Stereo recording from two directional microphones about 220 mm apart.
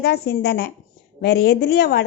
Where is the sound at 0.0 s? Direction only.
50° left (ahead or behind).